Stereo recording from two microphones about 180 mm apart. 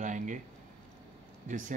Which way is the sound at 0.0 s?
45° right (ahead or behind).